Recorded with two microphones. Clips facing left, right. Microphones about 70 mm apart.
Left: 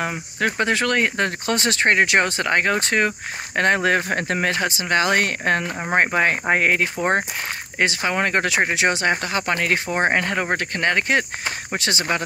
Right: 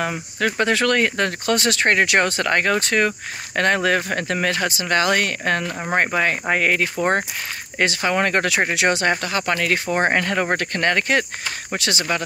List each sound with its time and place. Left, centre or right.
0.0 s speech: centre
9.8 s speech: centre
11.7 s speech: left